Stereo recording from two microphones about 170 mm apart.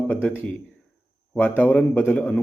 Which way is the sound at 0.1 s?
10° left (ahead or behind).